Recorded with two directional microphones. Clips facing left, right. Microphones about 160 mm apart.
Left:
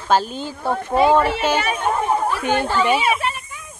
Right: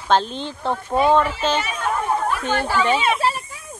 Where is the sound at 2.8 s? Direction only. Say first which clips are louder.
Even; 10° left (ahead or behind).